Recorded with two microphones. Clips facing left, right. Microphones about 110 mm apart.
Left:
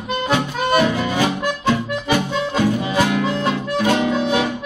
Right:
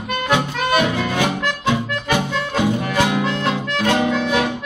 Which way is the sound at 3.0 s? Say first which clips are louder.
Even; 15° right (ahead or behind).